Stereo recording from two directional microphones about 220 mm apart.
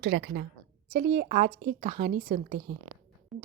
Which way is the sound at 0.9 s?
35° right (ahead or behind).